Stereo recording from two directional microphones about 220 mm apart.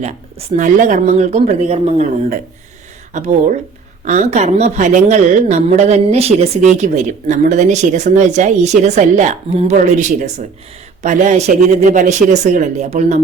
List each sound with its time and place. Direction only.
0.0 s a woman's voice: 35° right (ahead or behind)